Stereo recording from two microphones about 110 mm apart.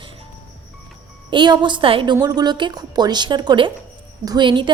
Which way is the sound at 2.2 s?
35° right (ahead or behind).